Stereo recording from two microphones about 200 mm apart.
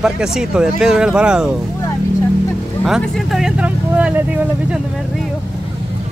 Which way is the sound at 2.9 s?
Centre (ahead or behind).